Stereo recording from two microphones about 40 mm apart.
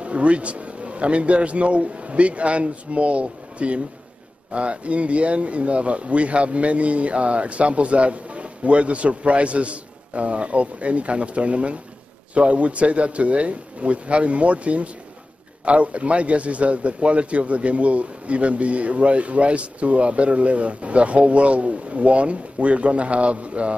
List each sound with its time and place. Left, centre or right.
0.0 s a man's voice: right